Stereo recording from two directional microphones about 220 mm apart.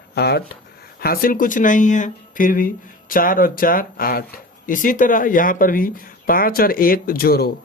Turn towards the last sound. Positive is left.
turn(degrees=45)  # may be behind; listen again after turning